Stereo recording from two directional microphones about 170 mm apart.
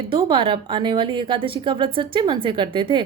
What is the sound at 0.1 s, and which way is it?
A woman's voice, 30° right (ahead or behind).